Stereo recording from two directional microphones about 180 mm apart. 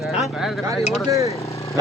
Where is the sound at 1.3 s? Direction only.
15° left (ahead or behind).